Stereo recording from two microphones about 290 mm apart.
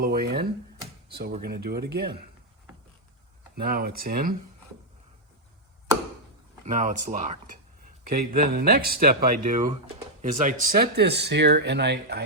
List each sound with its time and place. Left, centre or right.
0.0 s speech: right
3.6 s speech: right
6.7 s speech: right